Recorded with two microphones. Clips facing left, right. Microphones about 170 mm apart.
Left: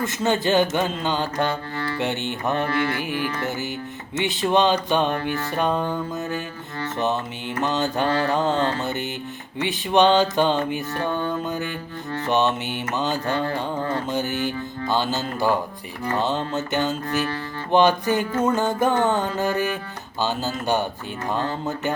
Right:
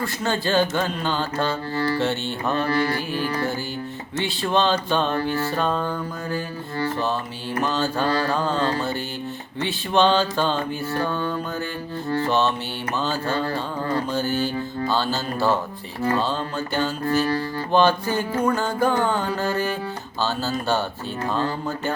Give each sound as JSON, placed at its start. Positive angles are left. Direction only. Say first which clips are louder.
{"t": 0.0, "sound": "mantra", "louder": "left 3 dB", "side_deg": 20}
{"t": 1.7, "sound": "music", "louder": "right 5 dB", "side_deg": -30}
{"t": 2.0, "sound": "mantra", "louder": "right 1 dB", "side_deg": 15}
{"t": 2.6, "sound": "music", "louder": "right 1 dB", "side_deg": -35}
{"t": 4.2, "sound": "mantra", "louder": "left 2 dB", "side_deg": 20}
{"t": 5.5, "sound": "music", "louder": "left 1 dB", "side_deg": 15}
{"t": 7.6, "sound": "music", "louder": "left 1 dB", "side_deg": 20}
{"t": 9.6, "sound": "mantra", "louder": "left 2 dB", "side_deg": 15}
{"t": 11.0, "sound": "music", "louder": "left 2 dB", "side_deg": 20}
{"t": 12.2, "sound": "mantra", "louder": "left 3 dB", "side_deg": 15}
{"t": 16.1, "sound": "music", "louder": "left 5 dB", "side_deg": 20}
{"t": 20.2, "sound": "mantra", "louder": "even", "side_deg": 15}
{"t": 21.3, "sound": "music", "louder": "left 1 dB", "side_deg": 20}